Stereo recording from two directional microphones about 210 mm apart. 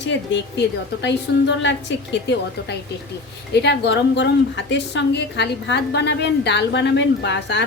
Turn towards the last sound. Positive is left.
turn(degrees=55)  # may be behind; listen again after turning